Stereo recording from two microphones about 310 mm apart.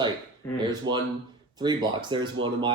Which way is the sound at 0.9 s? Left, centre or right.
Right.